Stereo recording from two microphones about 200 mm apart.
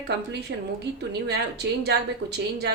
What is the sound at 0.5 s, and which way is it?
A woman's voice, 65° right (ahead or behind).